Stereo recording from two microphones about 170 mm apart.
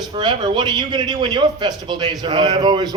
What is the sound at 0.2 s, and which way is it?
A man's voice, 25° right (ahead or behind).